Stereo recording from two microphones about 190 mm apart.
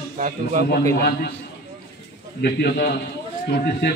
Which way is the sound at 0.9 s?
55° left (ahead or behind).